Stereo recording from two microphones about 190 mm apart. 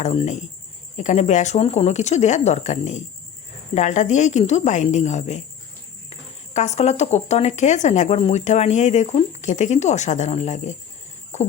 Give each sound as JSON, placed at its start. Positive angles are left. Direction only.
{"t": 0.0, "sound": "speech", "side_deg": 35}